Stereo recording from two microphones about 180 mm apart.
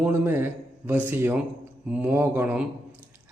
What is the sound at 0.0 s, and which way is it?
A man's voice, 10° right (ahead or behind).